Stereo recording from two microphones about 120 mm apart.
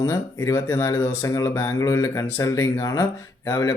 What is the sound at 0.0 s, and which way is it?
Speech, 25° left (ahead or behind).